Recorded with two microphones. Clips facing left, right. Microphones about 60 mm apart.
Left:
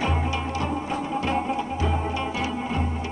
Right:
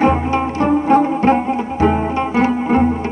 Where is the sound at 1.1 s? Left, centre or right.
Right.